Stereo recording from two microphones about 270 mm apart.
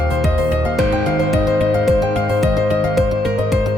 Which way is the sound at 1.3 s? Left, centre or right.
Centre.